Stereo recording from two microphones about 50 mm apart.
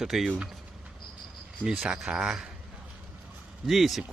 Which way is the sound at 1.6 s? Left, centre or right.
Centre.